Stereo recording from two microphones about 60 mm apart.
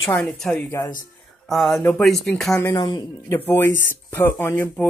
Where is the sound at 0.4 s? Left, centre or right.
Centre.